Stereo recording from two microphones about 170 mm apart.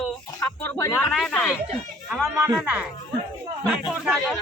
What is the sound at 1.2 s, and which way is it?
Speech, centre (ahead or behind).